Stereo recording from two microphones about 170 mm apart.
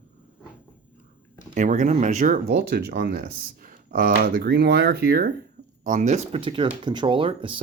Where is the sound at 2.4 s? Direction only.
65° right (ahead or behind).